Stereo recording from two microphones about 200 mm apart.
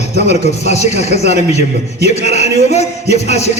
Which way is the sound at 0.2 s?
35° left (ahead or behind).